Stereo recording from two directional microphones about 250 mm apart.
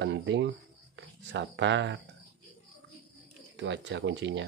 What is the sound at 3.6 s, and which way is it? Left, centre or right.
Speech, right.